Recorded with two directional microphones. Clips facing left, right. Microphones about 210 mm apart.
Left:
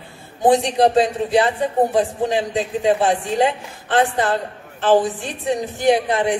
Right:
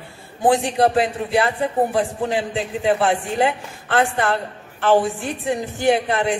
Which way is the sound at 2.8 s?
15° left (ahead or behind).